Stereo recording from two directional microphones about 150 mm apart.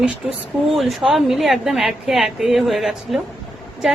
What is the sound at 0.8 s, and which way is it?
A woman's voice, centre (ahead or behind).